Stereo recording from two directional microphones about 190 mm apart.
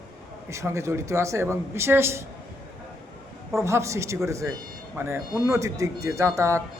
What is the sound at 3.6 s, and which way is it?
Speech, 15° right (ahead or behind).